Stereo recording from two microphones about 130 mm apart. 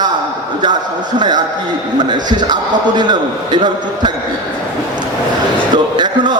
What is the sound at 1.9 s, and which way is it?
A man's voice, 35° right (ahead or behind).